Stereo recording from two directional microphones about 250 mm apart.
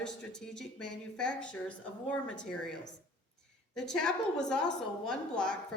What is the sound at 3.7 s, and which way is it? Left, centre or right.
A woman's voice, centre.